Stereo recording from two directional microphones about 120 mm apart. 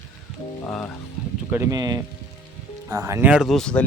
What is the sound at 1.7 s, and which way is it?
Speech, 30° right (ahead or behind).